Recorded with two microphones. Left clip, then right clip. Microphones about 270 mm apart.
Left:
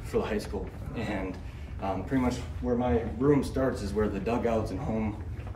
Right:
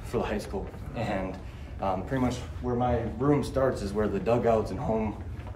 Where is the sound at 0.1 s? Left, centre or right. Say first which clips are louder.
Even; centre.